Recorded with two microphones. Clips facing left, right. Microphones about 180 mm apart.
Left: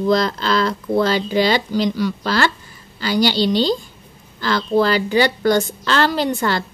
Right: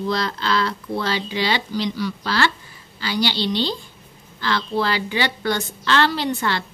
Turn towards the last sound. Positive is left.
turn(degrees=45)  # may be behind; listen again after turning